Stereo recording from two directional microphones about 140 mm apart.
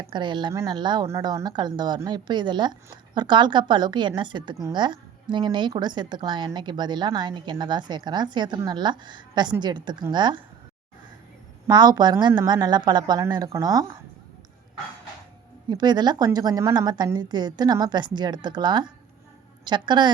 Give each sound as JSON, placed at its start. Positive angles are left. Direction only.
{"t": 0.1, "sound": "a woman's voice", "side_deg": -35}
{"t": 11.7, "sound": "a woman's voice", "side_deg": -30}
{"t": 15.7, "sound": "a woman's voice", "side_deg": -30}